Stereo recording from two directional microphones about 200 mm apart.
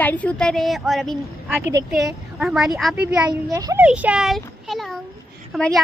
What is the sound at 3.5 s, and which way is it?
Speech, 15° right (ahead or behind).